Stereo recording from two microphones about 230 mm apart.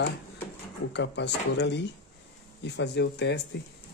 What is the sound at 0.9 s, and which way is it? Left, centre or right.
Speech, left.